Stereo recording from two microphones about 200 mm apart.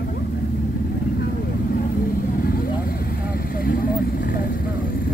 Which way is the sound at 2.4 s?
50° left (ahead or behind).